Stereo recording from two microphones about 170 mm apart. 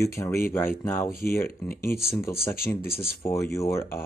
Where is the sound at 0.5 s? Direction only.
15° left (ahead or behind).